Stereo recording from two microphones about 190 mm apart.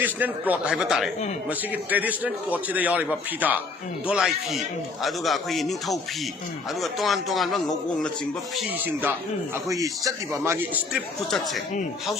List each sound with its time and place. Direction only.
0.0 s a man's voice: 10° right (ahead or behind)
11.3 s speech: centre (ahead or behind)